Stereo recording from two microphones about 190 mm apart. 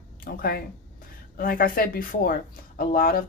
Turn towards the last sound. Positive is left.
turn(degrees=50)  # may be behind; listen again after turning